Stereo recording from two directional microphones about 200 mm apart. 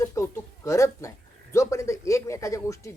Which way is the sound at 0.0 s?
15° left (ahead or behind).